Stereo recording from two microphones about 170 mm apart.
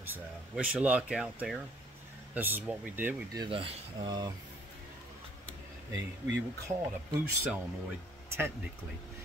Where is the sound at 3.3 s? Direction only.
30° right (ahead or behind).